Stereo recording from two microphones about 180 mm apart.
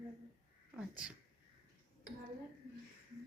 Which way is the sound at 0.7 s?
5° right (ahead or behind).